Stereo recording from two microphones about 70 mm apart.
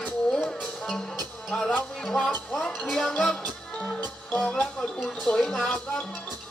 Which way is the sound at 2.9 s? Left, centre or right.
Centre.